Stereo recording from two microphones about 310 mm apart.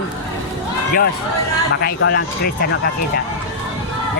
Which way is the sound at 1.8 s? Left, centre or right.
Left.